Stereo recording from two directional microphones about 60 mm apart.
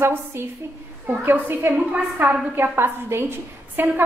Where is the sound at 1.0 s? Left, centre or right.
Right.